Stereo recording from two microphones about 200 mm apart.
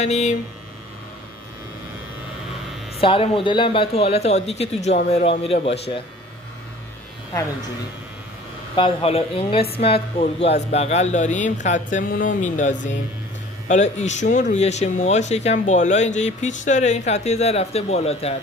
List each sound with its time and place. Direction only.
0.0 s speech: 35° left (ahead or behind)
3.0 s speech: 25° left (ahead or behind)
8.7 s speech: 25° left (ahead or behind)